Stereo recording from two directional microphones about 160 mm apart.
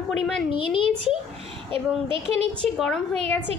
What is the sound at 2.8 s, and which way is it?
Speech, 5° left (ahead or behind).